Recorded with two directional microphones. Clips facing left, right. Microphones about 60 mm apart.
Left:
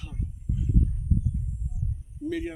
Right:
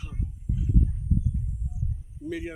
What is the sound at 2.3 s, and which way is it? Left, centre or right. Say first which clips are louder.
Speech: left 2 dB; centre.